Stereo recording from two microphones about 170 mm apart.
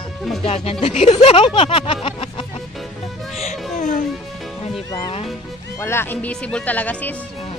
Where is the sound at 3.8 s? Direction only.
45° left (ahead or behind).